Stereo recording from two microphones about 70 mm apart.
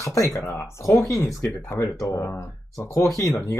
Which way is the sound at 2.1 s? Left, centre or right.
Left.